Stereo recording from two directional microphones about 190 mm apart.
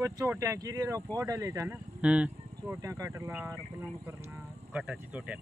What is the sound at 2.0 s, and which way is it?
Speech, 5° right (ahead or behind).